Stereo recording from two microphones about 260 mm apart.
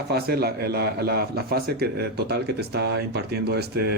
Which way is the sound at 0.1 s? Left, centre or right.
Right.